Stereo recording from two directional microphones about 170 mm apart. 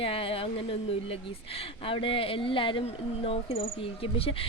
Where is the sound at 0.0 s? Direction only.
35° left (ahead or behind).